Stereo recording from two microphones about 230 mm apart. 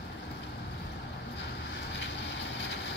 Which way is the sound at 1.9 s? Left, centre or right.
Left.